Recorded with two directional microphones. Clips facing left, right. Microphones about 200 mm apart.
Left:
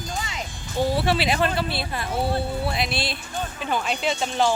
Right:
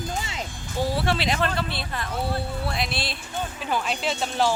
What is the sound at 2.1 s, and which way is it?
Speech, 25° left (ahead or behind).